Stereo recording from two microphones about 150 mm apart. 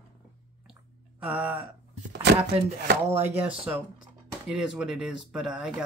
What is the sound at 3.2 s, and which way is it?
Speech, 10° right (ahead or behind).